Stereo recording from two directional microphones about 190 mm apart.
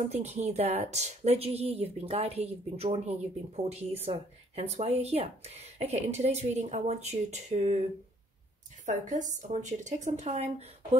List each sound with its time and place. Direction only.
0.1 s a woman's voice: 35° right (ahead or behind)
8.8 s a woman's voice: 40° right (ahead or behind)